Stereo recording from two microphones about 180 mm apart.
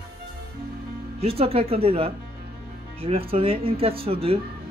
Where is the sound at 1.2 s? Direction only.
35° right (ahead or behind).